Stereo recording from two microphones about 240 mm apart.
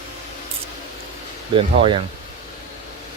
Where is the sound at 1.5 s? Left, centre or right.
Right.